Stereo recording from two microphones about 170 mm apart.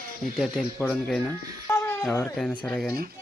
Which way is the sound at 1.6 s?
15° left (ahead or behind).